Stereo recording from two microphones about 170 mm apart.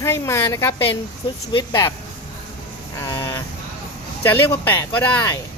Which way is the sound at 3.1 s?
20° left (ahead or behind).